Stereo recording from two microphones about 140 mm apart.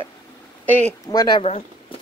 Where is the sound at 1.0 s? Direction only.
25° left (ahead or behind).